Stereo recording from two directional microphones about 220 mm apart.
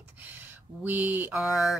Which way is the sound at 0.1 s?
10° right (ahead or behind).